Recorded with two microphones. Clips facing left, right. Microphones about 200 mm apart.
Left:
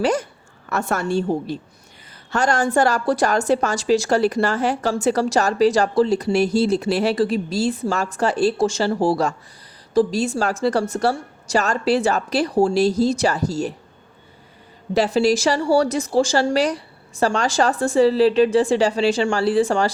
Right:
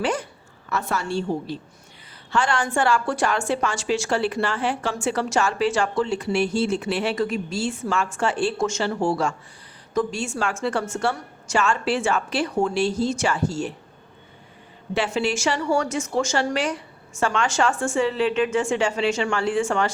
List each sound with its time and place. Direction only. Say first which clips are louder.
0.0 s a woman's voice: left 5 dB; 40° left (ahead or behind)
14.9 s a woman's voice: left 6 dB; 40° left (ahead or behind)